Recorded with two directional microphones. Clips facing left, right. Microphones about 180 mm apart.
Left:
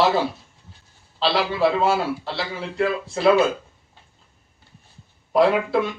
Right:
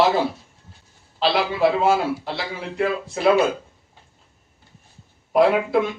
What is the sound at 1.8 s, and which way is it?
A man's voice, 15° right (ahead or behind).